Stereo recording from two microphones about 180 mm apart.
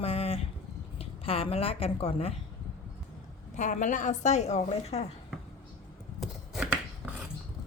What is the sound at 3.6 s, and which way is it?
Speech, 40° left (ahead or behind).